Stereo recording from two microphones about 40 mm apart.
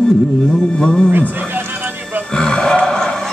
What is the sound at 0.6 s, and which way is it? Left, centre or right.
Music, centre.